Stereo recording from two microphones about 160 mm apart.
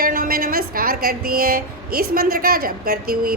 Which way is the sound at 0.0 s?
65° right (ahead or behind).